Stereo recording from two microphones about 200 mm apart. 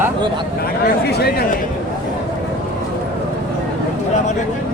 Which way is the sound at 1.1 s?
55° left (ahead or behind).